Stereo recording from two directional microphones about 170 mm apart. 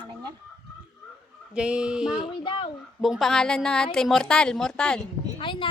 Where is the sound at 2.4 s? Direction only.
30° left (ahead or behind).